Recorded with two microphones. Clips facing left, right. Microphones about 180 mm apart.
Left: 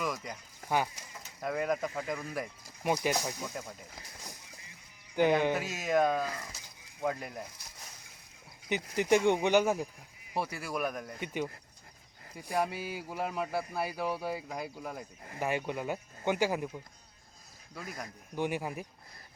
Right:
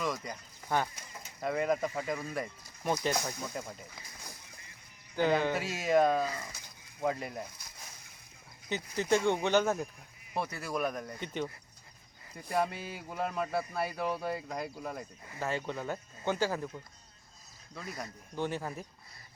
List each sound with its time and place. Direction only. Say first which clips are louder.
0.0 s a man's voice: right 1 dB; 5° left (ahead or behind)
2.8 s speech: left 1 dB; 10° left (ahead or behind)
3.6 s a man's voice: right 1 dB; centre (ahead or behind)
5.1 s speech: left 2 dB; 15° left (ahead or behind)
5.5 s a man's voice: right 2 dB; centre (ahead or behind)
8.7 s a man's voice: left 2 dB; 15° left (ahead or behind)
17.7 s a man's voice: right 1 dB; centre (ahead or behind)
18.3 s speech: left 2 dB; 15° left (ahead or behind)